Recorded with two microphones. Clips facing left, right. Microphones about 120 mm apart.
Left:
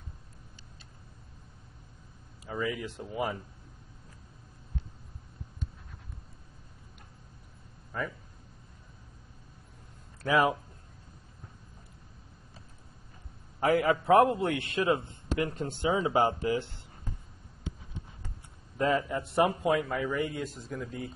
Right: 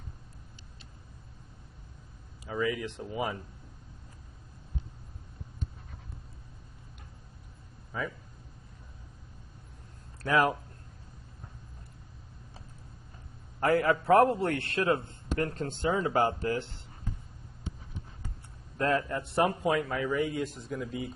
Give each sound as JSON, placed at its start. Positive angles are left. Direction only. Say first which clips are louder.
{"t": 2.4, "sound": "a man's voice", "louder": "right 2 dB", "side_deg": 0}
{"t": 7.9, "sound": "a man's voice", "louder": "even", "side_deg": 0}
{"t": 10.2, "sound": "a man's voice", "louder": "even", "side_deg": 0}
{"t": 13.6, "sound": "a man's voice", "louder": "even", "side_deg": 10}
{"t": 14.0, "sound": "a man's voice", "louder": "even", "side_deg": 0}
{"t": 18.8, "sound": "a man's voice", "louder": "left 1 dB", "side_deg": 5}